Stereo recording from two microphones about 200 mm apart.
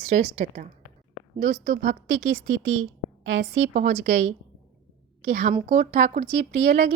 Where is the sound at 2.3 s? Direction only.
70° right (ahead or behind).